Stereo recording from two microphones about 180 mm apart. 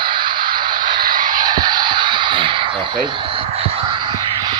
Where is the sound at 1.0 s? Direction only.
50° right (ahead or behind).